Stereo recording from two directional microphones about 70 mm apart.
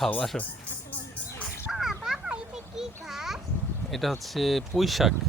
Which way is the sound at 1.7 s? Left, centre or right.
Centre.